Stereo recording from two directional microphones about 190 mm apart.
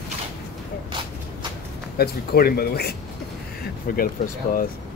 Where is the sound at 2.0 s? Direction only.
55° left (ahead or behind).